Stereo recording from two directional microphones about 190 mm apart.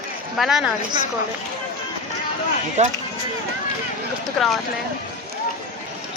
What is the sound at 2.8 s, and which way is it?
Speech, 35° right (ahead or behind).